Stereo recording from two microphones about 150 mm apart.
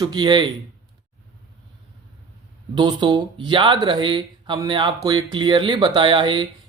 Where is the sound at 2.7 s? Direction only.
30° right (ahead or behind).